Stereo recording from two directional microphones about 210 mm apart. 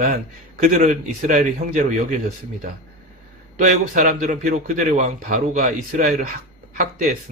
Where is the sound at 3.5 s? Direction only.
40° right (ahead or behind).